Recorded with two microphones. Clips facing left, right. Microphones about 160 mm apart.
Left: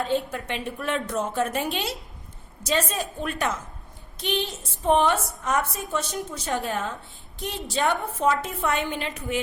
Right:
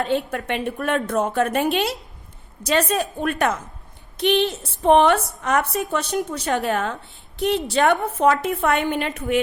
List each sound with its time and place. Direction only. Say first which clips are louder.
0.0 s a woman's voice: right 3 dB; 70° right (ahead or behind)